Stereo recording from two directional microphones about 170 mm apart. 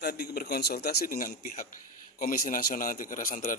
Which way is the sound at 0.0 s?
70° left (ahead or behind).